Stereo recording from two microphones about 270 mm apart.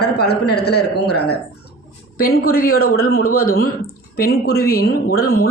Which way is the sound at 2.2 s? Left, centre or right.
Left.